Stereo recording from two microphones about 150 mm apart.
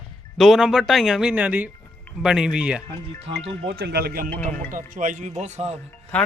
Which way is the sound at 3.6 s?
90° right.